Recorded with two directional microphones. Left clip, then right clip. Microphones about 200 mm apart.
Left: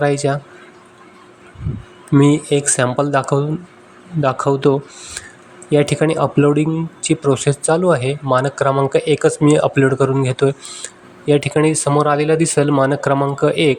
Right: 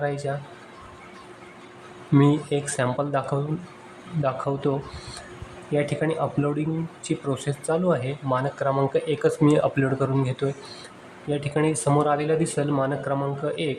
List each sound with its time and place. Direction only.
0.0 s speech: 35° left (ahead or behind)
2.1 s speech: 25° left (ahead or behind)
5.7 s speech: 30° left (ahead or behind)